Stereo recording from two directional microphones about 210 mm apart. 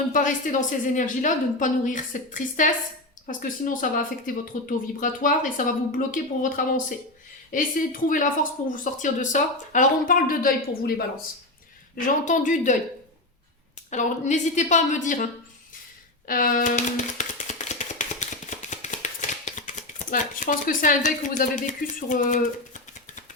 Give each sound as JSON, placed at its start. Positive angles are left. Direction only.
{"t": 0.1, "sound": "a woman's voice", "side_deg": 40}
{"t": 13.9, "sound": "a woman's voice", "side_deg": 35}
{"t": 16.2, "sound": "a sound", "side_deg": 40}
{"t": 20.1, "sound": "speech", "side_deg": 40}